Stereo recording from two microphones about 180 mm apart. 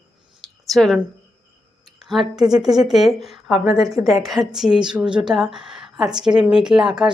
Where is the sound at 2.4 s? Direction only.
20° right (ahead or behind).